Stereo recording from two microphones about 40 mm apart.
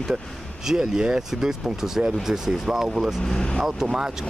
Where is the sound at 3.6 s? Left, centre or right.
Centre.